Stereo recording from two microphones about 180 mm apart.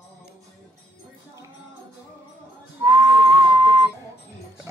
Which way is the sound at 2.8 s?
25° right (ahead or behind).